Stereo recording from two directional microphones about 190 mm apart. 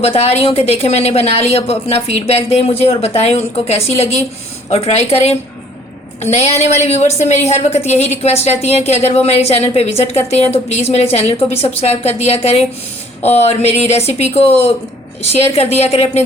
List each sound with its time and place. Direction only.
0.0 s speech: 30° left (ahead or behind)